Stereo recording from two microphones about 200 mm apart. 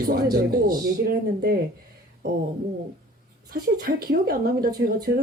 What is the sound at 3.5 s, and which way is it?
Speech, 50° right (ahead or behind).